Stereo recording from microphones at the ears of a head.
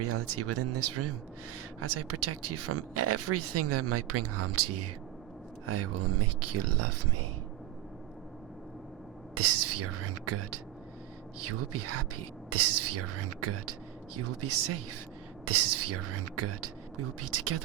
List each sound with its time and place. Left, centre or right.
0.0 s speech: right
9.3 s speech: right